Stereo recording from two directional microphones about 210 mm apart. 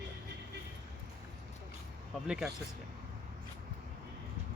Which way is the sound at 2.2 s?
5° right (ahead or behind).